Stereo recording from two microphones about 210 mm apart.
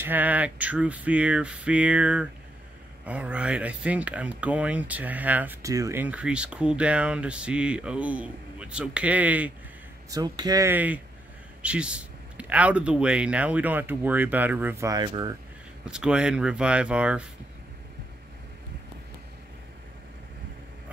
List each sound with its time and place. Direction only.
0.0 s speech: 10° right (ahead or behind)
10.1 s speech: 20° right (ahead or behind)
15.8 s speech: 5° right (ahead or behind)